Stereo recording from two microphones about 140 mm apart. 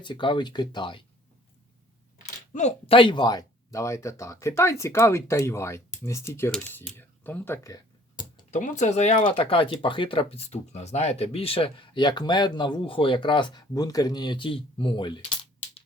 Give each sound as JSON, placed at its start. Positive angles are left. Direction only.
{"t": 0.0, "sound": "speech", "side_deg": 35}
{"t": 2.2, "sound": "a sound", "side_deg": 55}
{"t": 2.8, "sound": "speech", "side_deg": 40}
{"t": 8.4, "sound": "speech", "side_deg": 60}
{"t": 9.2, "sound": "speech", "side_deg": 40}